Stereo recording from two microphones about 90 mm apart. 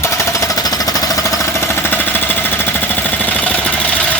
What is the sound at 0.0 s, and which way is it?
Jackhammer, 35° left (ahead or behind).